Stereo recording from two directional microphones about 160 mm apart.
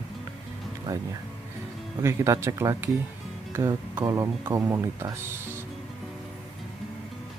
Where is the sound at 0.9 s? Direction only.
20° right (ahead or behind).